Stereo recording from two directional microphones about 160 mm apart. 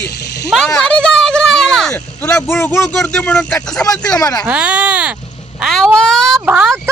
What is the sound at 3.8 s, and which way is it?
Speech, 20° left (ahead or behind).